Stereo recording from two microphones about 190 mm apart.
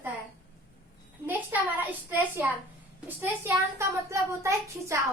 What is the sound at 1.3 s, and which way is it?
A woman's voice, 10° right (ahead or behind).